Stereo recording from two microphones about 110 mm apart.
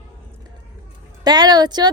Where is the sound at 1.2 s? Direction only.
35° right (ahead or behind).